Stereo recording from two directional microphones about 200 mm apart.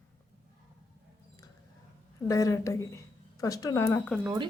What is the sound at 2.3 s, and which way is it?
Speech, 15° left (ahead or behind).